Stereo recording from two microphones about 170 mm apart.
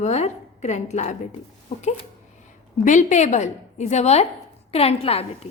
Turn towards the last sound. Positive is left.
turn(degrees=35)  # may be behind; listen again after turning